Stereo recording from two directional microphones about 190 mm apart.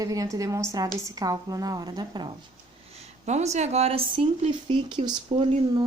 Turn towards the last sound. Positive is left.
turn(degrees=-25)  # may be behind; listen again after turning